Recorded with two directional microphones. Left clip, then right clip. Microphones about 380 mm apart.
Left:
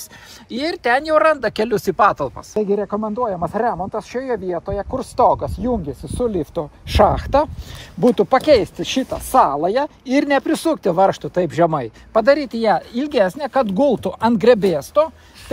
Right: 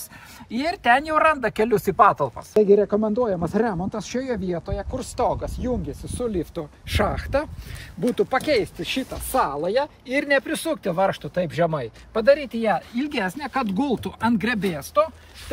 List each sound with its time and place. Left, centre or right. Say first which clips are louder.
0.8 s speech: left 3 dB; centre
2.9 s speech: left 1 dB; right
3.4 s speech: left 4 dB; centre